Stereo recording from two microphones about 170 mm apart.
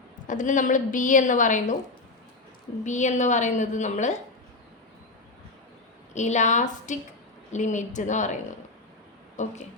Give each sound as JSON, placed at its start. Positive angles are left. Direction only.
{"t": 0.3, "sound": "a woman's voice", "side_deg": 50}
{"t": 2.8, "sound": "a woman's voice", "side_deg": 45}
{"t": 6.1, "sound": "a woman's voice", "side_deg": 45}